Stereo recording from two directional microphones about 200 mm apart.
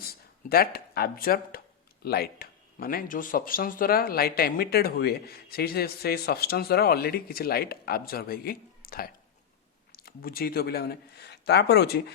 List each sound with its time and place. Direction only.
0.0 s speech: 50° left (ahead or behind)